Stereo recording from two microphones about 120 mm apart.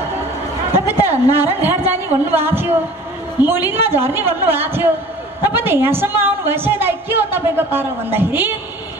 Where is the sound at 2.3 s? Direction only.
20° right (ahead or behind).